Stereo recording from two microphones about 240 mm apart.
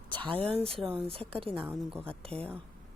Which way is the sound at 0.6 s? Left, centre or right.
Centre.